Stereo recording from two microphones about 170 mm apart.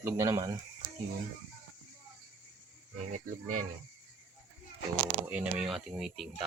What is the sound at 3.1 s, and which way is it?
Speech, 45° right (ahead or behind).